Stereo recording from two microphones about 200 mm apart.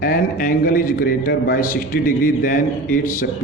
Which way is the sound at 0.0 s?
45° left (ahead or behind).